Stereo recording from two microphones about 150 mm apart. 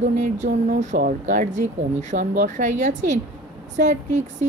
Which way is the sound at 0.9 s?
70° right (ahead or behind).